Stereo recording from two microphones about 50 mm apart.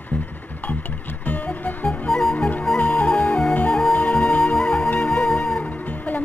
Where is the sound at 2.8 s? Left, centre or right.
Left.